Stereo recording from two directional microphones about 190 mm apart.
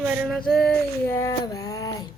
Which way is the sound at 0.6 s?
10° left (ahead or behind).